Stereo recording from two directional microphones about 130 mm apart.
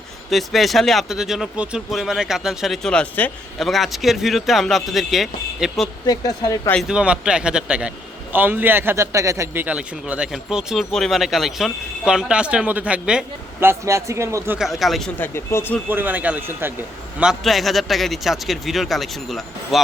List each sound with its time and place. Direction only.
0.3 s speech: centre (ahead or behind)
6.1 s speech: 30° left (ahead or behind)
6.8 s a man's voice: 5° right (ahead or behind)
14.6 s speech: centre (ahead or behind)
15.2 s speech: 20° left (ahead or behind)
15.9 s a man's voice: 15° right (ahead or behind)
17.2 s speech: 5° right (ahead or behind)